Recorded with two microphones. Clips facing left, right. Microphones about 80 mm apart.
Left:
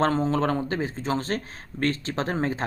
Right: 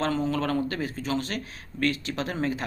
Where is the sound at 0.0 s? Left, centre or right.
Left.